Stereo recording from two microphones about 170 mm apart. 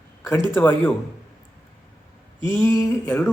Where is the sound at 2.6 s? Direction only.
15° left (ahead or behind).